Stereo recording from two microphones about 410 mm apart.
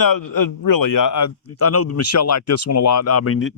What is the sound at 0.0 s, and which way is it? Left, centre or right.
A man's voice, left.